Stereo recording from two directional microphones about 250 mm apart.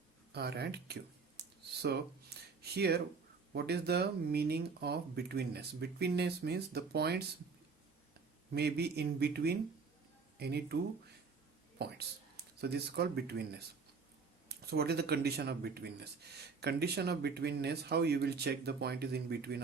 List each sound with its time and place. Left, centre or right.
0.3 s speech: right
8.5 s speech: right
11.8 s speech: right